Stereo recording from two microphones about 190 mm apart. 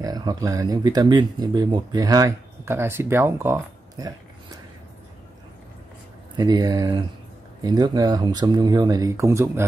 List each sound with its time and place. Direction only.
0.0 s speech: 20° right (ahead or behind)
6.3 s speech: 25° right (ahead or behind)